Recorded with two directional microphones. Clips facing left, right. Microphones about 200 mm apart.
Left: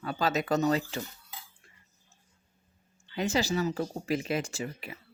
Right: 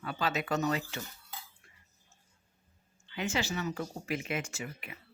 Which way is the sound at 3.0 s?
35° left (ahead or behind).